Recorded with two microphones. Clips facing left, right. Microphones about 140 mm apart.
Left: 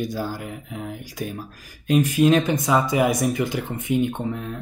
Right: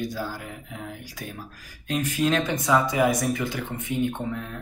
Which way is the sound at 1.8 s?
15° left (ahead or behind).